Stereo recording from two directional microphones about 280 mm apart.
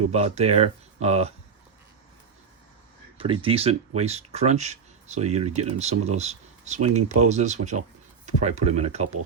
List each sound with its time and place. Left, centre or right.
0.1 s speech: right
3.2 s speech: centre